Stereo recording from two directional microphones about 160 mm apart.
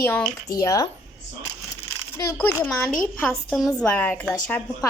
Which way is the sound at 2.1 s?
20° left (ahead or behind).